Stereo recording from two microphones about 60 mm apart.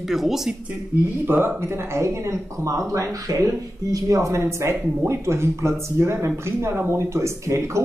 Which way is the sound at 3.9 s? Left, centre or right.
Right.